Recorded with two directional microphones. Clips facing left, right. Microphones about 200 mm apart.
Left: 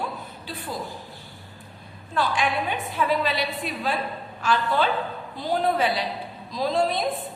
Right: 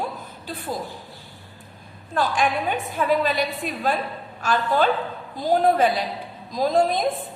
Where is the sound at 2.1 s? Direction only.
45° right (ahead or behind).